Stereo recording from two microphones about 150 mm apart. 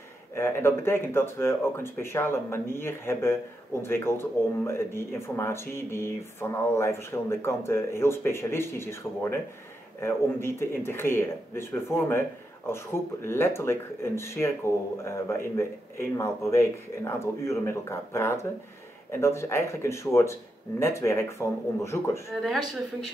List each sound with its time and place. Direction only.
0.3 s speech: 15° left (ahead or behind)